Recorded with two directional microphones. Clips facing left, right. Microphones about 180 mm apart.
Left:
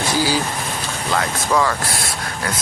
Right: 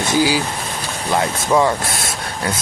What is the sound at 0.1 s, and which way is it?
Speech, 15° right (ahead or behind).